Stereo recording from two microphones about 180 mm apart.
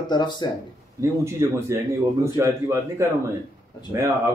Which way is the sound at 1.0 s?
15° right (ahead or behind).